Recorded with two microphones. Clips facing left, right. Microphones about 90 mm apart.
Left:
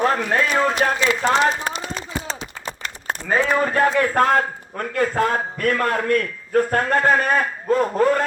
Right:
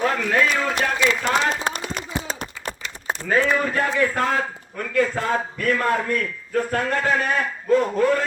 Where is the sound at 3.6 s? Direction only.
50° left (ahead or behind).